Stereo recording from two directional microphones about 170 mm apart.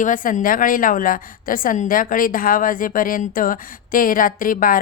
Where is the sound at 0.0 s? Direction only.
50° left (ahead or behind).